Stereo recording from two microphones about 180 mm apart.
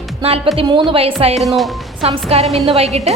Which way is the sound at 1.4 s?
Centre (ahead or behind).